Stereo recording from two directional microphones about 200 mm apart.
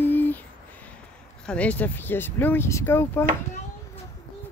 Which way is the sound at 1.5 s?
5° left (ahead or behind).